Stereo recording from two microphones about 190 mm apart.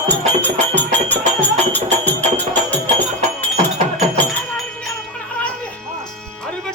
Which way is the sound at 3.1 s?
40° right (ahead or behind).